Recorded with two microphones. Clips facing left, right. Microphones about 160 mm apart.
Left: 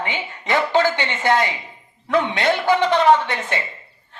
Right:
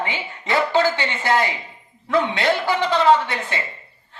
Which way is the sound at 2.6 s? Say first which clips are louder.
Left 3 dB; 20° left (ahead or behind).